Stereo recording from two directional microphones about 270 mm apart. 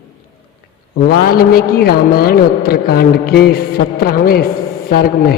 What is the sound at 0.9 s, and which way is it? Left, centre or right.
A man's voice, left.